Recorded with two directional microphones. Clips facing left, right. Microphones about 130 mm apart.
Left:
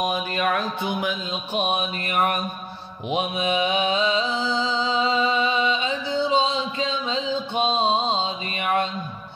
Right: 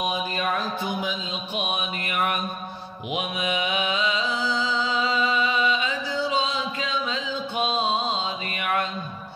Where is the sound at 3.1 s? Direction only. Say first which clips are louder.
Left 4 dB; 30° left (ahead or behind).